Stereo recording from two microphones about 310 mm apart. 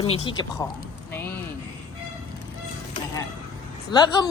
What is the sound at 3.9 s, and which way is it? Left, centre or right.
Speech, centre.